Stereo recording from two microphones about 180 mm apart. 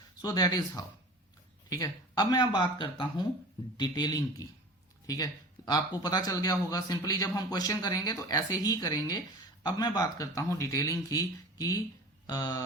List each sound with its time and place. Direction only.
0.2 s a man's voice: 20° left (ahead or behind)
1.7 s a man's voice: 20° left (ahead or behind)